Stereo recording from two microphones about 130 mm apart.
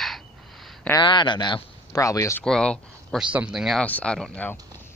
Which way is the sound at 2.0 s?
25° left (ahead or behind).